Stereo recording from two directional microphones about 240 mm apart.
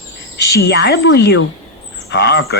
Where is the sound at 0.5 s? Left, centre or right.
Left.